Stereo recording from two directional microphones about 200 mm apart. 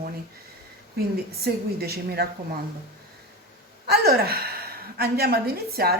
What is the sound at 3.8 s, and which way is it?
A woman's voice, 50° right (ahead or behind).